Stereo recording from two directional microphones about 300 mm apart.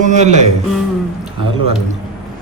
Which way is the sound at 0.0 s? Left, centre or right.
Right.